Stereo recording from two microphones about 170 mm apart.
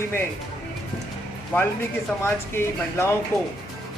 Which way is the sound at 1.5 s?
10° left (ahead or behind).